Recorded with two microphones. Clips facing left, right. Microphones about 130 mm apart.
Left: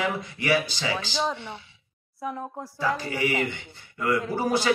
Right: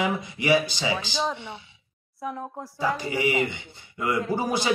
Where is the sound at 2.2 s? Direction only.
Centre (ahead or behind).